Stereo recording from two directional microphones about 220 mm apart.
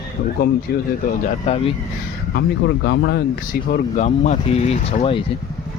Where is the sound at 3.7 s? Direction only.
35° left (ahead or behind).